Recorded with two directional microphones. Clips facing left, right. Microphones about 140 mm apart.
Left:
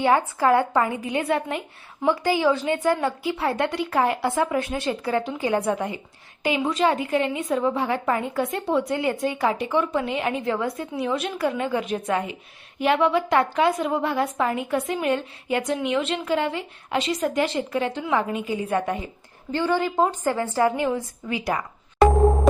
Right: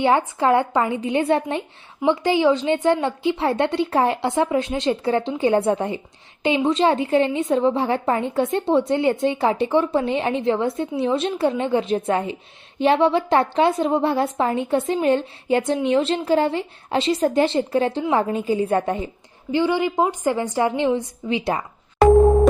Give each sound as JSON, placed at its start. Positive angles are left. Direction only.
{"t": 0.0, "sound": "a woman's voice", "side_deg": -25}
{"t": 19.5, "sound": "a woman's voice", "side_deg": -15}